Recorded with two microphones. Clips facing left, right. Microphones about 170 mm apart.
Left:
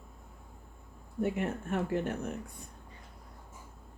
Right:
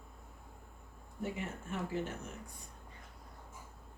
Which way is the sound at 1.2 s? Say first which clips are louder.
Left 8 dB; 60° left (ahead or behind).